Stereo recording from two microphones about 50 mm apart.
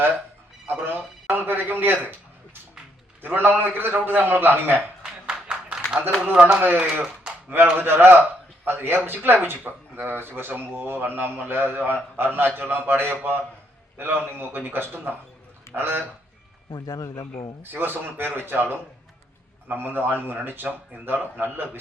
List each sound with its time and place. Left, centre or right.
0.9 s a man's voice: right
3.2 s a man's voice: right
5.0 s clapping: centre
6.3 s speech: right
6.6 s a man's voice: right
17.6 s a man's voice: right